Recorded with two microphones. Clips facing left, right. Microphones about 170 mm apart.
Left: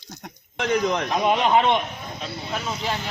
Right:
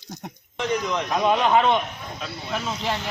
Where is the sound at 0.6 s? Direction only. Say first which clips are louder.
Left 3 dB; 55° left (ahead or behind).